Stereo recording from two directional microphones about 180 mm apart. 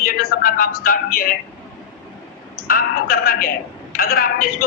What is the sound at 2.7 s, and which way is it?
A man's voice, 55° left (ahead or behind).